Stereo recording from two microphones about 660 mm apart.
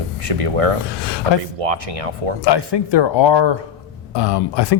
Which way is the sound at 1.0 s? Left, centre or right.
Left.